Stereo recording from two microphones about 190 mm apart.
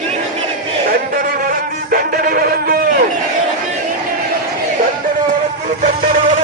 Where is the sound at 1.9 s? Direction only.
50° right (ahead or behind).